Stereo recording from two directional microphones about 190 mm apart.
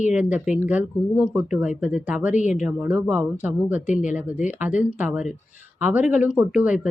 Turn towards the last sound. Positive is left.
turn(degrees=-5)  # may be behind; listen again after turning